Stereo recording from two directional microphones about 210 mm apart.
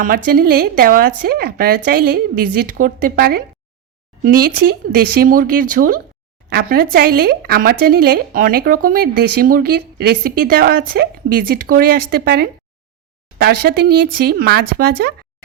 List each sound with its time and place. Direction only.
0.3 s speech: 45° right (ahead or behind)